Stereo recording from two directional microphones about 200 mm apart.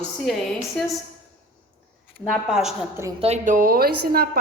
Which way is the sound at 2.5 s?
5° right (ahead or behind).